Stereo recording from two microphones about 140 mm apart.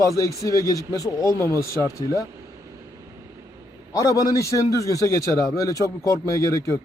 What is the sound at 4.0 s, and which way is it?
A man's voice, 25° left (ahead or behind).